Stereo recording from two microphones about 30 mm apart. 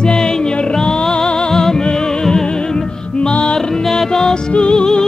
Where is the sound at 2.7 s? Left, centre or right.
Left.